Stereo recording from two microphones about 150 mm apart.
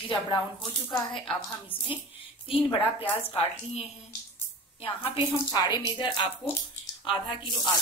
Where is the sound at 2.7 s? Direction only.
40° left (ahead or behind).